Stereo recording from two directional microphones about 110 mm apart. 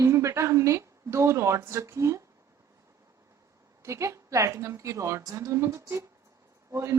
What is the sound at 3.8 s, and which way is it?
A woman's voice, 25° right (ahead or behind).